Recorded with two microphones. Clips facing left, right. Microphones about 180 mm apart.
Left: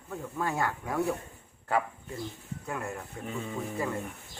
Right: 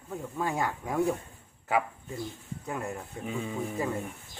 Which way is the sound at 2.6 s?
15° right (ahead or behind).